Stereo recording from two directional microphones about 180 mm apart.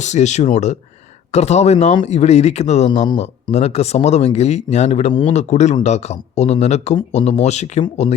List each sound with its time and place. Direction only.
0.0 s speech: 40° left (ahead or behind)
3.1 s speech: 25° left (ahead or behind)
3.5 s speech: 35° left (ahead or behind)